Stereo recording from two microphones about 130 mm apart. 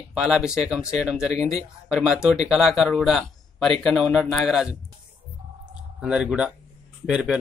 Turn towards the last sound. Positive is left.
turn(degrees=-5)  # may be behind; listen again after turning